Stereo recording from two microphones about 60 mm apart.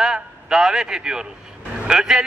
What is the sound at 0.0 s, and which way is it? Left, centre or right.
A man's voice, centre.